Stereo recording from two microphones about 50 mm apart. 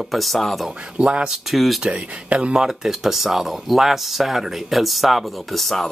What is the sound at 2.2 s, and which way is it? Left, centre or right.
Speech, right.